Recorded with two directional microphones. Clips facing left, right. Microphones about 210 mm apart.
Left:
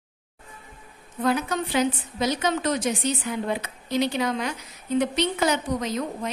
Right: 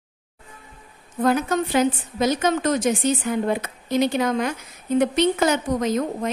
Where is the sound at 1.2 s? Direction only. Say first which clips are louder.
Right 4 dB; 45° right (ahead or behind).